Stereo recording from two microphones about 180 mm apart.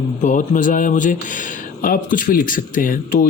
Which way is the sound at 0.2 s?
45° left (ahead or behind).